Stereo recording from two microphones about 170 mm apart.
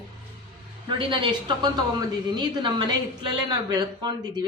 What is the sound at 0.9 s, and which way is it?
A woman's voice, 30° right (ahead or behind).